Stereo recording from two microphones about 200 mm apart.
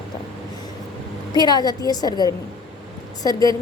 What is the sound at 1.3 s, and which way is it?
A woman's voice, 20° left (ahead or behind).